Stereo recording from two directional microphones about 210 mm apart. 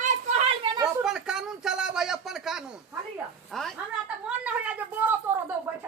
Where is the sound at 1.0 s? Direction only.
5° right (ahead or behind).